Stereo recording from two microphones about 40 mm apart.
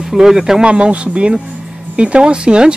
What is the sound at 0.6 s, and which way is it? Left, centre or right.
Speech, right.